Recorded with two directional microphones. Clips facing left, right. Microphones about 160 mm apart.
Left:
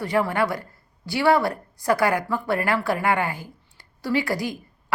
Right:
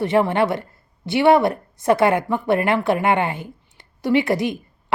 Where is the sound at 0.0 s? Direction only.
25° right (ahead or behind).